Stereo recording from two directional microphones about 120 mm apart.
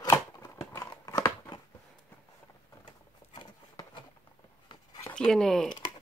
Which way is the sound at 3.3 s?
40° left (ahead or behind).